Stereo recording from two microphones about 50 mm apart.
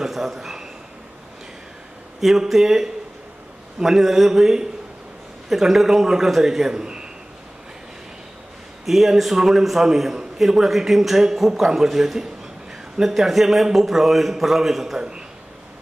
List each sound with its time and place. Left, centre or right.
0.0 s a sound: centre
2.1 s a man's voice: centre
8.8 s a man's voice: centre
15.0 s a man's voice: centre